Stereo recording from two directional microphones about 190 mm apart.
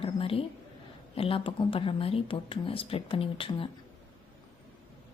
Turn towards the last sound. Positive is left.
turn(degrees=30)  # may be behind; listen again after turning